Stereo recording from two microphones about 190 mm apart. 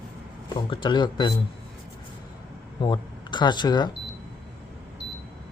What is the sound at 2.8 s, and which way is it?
Speech, 25° left (ahead or behind).